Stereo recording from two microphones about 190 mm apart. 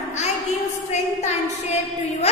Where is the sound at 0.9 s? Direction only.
35° left (ahead or behind).